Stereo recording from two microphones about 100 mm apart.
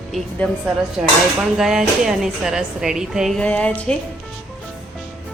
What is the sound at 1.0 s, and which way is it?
A woman's voice, 5° right (ahead or behind).